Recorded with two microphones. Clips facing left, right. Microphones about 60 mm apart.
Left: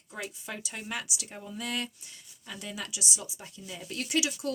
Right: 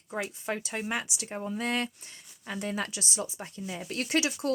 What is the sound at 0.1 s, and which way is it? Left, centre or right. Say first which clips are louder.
Speech: right 6 dB; right.